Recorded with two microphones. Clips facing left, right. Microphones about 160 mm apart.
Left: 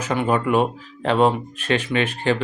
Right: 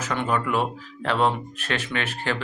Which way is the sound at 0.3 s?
25° left (ahead or behind).